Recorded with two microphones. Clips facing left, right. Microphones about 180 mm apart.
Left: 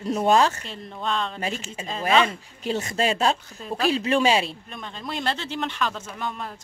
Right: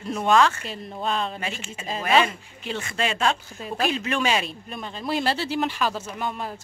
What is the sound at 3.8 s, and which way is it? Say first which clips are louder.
Speech: left 5 dB; 30° left (ahead or behind).